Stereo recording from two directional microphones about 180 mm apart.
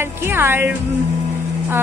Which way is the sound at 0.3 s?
10° right (ahead or behind).